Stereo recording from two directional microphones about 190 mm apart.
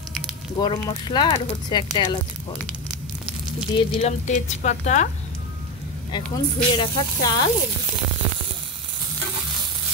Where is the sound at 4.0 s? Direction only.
40° left (ahead or behind).